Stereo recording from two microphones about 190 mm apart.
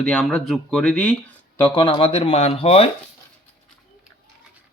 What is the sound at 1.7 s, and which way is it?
Speech, 25° left (ahead or behind).